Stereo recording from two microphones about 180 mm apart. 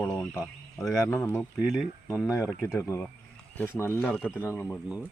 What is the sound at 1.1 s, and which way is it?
Speech, 10° left (ahead or behind).